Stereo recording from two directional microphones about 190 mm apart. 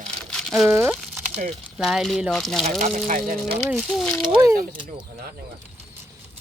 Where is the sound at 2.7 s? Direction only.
45° right (ahead or behind).